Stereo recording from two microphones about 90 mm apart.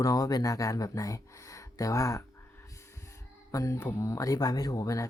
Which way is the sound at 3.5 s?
40° left (ahead or behind).